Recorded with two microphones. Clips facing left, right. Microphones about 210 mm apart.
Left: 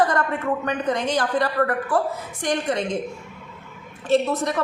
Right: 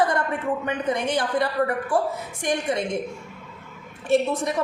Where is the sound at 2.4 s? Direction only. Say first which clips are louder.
Left 1 dB; 10° right (ahead or behind).